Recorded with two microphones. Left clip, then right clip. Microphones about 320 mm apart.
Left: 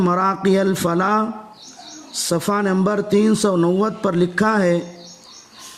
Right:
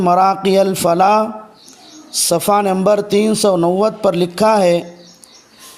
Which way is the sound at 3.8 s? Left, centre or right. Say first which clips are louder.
Right 5 dB; centre.